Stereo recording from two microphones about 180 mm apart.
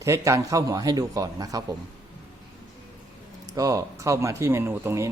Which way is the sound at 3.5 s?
20° right (ahead or behind).